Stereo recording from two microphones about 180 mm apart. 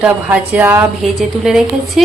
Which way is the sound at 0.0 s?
10° right (ahead or behind).